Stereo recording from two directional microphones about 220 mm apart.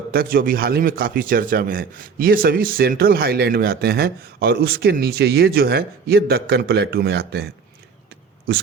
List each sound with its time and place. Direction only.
0.1 s a man's voice: 40° right (ahead or behind)